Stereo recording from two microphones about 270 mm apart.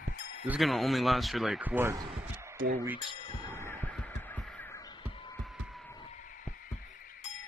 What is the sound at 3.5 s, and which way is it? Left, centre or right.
Fowl, centre.